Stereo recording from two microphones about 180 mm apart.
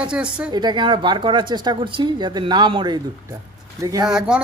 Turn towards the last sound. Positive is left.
turn(degrees=-5)  # may be behind; listen again after turning